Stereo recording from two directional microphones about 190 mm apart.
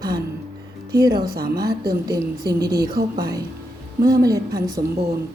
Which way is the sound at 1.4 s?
55° right (ahead or behind).